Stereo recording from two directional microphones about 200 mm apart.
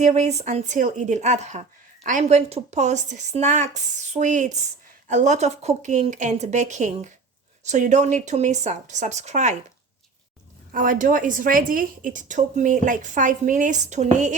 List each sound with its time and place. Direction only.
0.0 s a woman's voice: 35° right (ahead or behind)
10.7 s a woman's voice: 45° right (ahead or behind)